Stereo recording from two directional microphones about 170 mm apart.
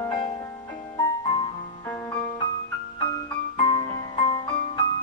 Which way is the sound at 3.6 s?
25° left (ahead or behind).